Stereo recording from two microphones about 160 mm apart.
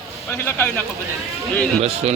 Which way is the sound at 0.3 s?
15° left (ahead or behind).